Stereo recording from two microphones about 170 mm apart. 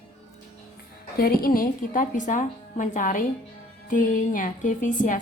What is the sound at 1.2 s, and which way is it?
A woman's voice, 60° left (ahead or behind).